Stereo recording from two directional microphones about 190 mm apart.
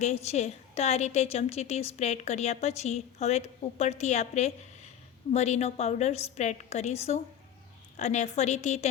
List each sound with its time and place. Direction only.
0.0 s a woman's voice: 35° left (ahead or behind)